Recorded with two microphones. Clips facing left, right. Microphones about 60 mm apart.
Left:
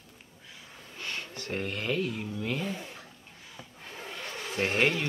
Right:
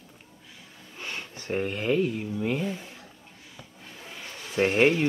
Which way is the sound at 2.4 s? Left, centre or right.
Centre.